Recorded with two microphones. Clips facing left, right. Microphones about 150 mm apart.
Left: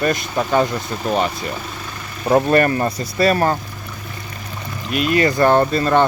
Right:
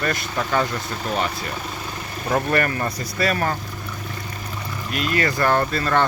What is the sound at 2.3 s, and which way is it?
Speech, 25° left (ahead or behind).